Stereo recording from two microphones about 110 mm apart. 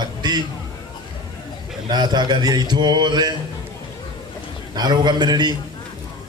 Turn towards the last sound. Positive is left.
turn(degrees=-40)  # may be behind; listen again after turning